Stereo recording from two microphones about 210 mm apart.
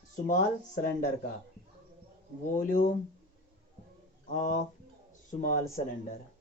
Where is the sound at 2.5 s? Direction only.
40° left (ahead or behind).